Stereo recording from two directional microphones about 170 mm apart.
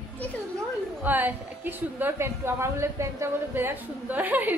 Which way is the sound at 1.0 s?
10° right (ahead or behind).